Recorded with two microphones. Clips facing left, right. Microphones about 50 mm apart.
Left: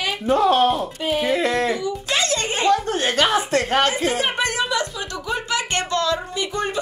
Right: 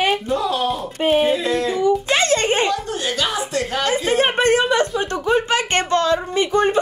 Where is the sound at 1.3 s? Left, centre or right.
Left.